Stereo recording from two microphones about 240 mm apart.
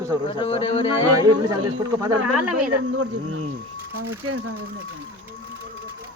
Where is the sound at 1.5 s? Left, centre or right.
Centre.